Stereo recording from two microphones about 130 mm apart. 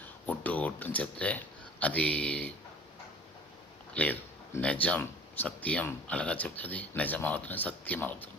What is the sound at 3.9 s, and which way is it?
Speech, 10° left (ahead or behind).